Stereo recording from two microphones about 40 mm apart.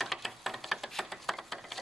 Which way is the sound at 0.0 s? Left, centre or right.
Centre.